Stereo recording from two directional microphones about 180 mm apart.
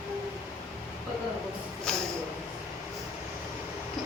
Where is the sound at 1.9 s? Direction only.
5° left (ahead or behind).